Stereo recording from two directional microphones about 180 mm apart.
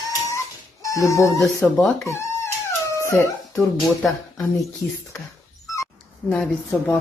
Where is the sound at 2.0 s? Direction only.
15° left (ahead or behind).